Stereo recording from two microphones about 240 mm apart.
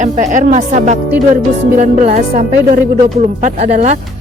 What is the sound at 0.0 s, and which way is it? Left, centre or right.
A woman's voice, right.